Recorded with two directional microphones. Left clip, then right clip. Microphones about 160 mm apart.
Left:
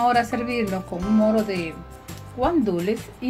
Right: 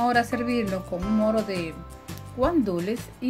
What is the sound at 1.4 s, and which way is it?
A woman's voice, 25° right (ahead or behind).